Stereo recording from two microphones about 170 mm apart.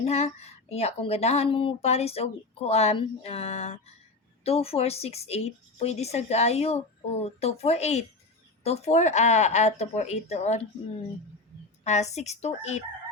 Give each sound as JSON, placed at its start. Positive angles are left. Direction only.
{"t": 0.0, "sound": "speech", "side_deg": 40}
{"t": 11.9, "sound": "speech", "side_deg": 40}